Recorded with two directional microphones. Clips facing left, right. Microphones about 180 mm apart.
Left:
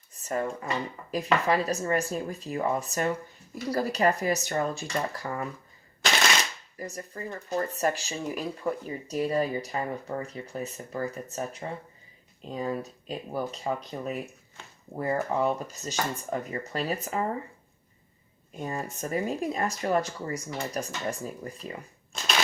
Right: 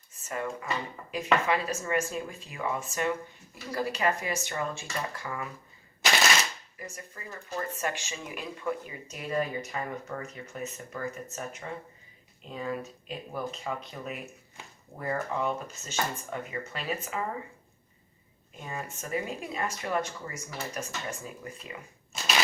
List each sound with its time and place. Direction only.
0.1 s dishes: 35° left (ahead or behind)
1.1 s speech: 40° left (ahead or behind)
6.7 s speech: 35° left (ahead or behind)
18.6 s speech: 40° left (ahead or behind)